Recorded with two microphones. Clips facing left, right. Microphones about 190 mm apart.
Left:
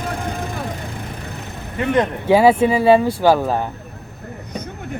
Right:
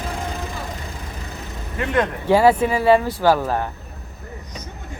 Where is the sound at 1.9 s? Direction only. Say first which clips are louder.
Left 2 dB; 20° left (ahead or behind).